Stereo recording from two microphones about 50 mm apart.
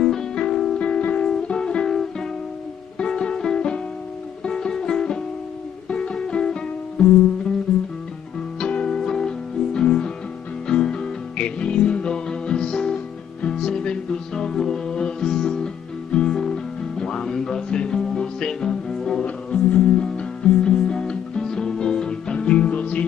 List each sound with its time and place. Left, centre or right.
0.0 s music: centre
0.8 s music: left
3.0 s music: centre
8.5 s music: left
19.2 s music: left